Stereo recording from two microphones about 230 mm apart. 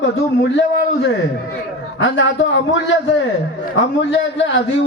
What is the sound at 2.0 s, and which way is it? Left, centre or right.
Speech, left.